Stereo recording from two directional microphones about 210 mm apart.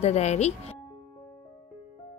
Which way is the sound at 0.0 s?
30° left (ahead or behind).